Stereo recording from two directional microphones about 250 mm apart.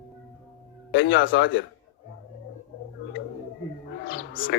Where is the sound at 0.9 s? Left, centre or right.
Left.